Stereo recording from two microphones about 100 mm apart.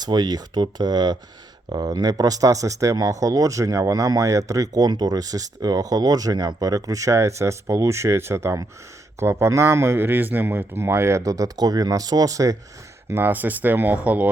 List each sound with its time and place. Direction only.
0.0 s speech: 45° right (ahead or behind)
13.1 s speech: 20° right (ahead or behind)